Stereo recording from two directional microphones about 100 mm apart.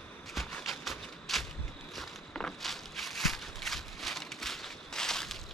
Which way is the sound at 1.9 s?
5° left (ahead or behind).